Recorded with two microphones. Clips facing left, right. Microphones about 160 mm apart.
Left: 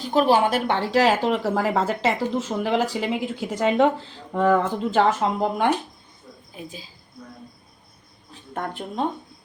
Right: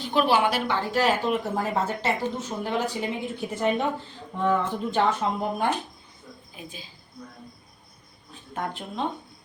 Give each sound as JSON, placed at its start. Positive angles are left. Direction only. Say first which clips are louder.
{"t": 0.0, "sound": "a woman's voice", "louder": "left 3 dB", "side_deg": 40}
{"t": 0.7, "sound": "speech", "louder": "left 4 dB", "side_deg": 85}